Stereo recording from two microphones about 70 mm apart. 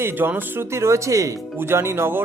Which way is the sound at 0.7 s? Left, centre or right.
Right.